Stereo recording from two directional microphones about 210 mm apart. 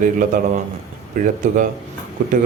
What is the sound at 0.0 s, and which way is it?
Speech, 40° right (ahead or behind).